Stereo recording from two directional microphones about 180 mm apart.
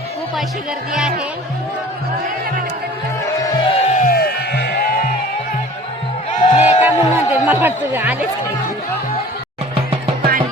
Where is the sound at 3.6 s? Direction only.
40° left (ahead or behind); by 5.0 s 60° left (ahead or behind).